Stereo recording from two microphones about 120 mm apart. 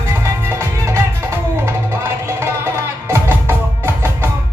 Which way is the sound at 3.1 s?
20° right (ahead or behind).